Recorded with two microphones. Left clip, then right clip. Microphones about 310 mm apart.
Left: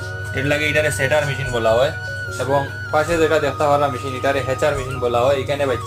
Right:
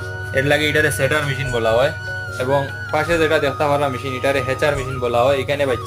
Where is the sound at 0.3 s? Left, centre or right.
Centre.